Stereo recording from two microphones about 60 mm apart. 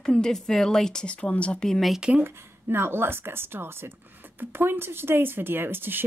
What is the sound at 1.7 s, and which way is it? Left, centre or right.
Speech, centre.